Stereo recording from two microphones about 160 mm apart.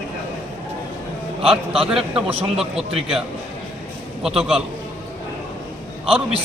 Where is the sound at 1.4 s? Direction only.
35° right (ahead or behind).